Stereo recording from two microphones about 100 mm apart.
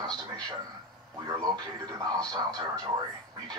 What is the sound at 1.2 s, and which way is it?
Speech, 40° right (ahead or behind).